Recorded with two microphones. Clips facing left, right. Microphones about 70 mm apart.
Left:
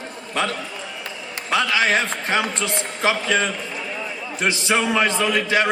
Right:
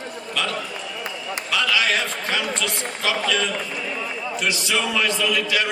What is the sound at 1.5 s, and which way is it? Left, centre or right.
A man's voice, left.